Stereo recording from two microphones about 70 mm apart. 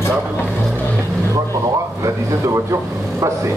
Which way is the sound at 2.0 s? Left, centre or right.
Right.